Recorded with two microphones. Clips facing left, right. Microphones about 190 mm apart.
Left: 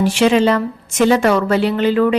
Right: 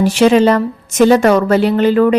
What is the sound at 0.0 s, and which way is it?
A woman's voice, 40° right (ahead or behind).